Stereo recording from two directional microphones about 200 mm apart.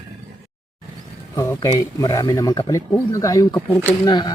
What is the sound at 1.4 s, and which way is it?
Speech, 15° left (ahead or behind).